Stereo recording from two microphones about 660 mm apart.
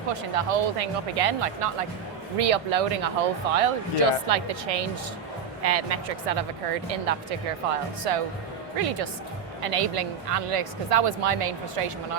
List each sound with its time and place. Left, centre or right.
0.1 s speech: right